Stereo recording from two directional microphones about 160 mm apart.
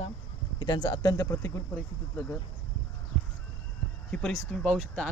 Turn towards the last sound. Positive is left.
turn(degrees=5)  # may be behind; listen again after turning